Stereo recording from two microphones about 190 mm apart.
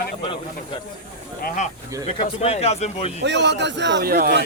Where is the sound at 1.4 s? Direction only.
40° left (ahead or behind).